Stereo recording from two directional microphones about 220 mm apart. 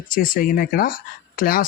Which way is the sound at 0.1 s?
40° left (ahead or behind).